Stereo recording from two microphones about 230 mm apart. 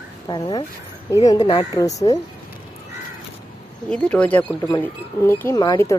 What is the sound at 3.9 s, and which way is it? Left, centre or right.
Speech, centre.